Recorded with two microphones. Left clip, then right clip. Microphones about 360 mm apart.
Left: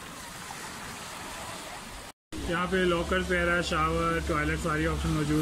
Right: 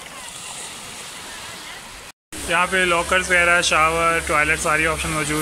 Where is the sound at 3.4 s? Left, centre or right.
Centre.